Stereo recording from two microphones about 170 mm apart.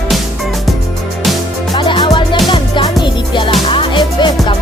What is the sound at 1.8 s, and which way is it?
Music, 30° left (ahead or behind).